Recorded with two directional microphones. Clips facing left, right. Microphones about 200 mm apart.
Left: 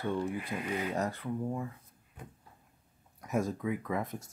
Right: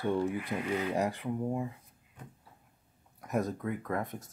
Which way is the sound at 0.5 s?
20° right (ahead or behind).